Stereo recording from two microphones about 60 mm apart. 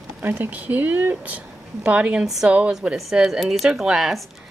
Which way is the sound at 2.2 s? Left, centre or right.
Centre.